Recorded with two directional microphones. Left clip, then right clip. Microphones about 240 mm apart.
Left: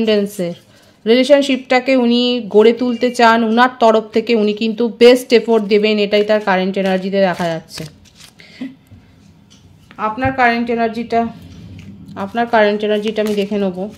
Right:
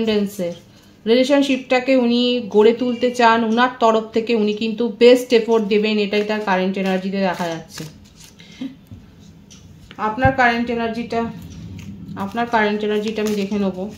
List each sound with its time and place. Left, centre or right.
0.0 s speech: left
9.9 s speech: left